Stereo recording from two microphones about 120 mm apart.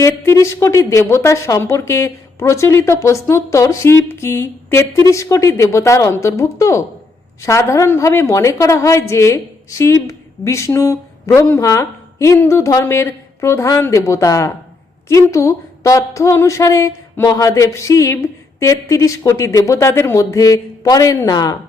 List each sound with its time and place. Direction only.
0.0 s a woman's voice: 25° left (ahead or behind)